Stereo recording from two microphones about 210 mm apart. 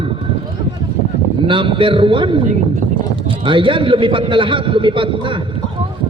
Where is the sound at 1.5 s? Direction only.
25° right (ahead or behind).